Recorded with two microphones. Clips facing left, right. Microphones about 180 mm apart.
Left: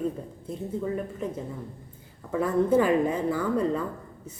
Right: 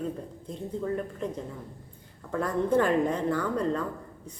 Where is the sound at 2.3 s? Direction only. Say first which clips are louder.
Left 3 dB; 5° left (ahead or behind).